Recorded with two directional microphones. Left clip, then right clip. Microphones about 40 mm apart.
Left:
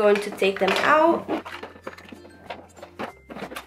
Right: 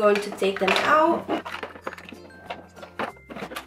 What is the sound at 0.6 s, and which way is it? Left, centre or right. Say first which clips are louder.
Speech: even; centre.